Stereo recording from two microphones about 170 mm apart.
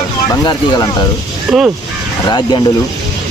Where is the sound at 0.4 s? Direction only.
25° left (ahead or behind).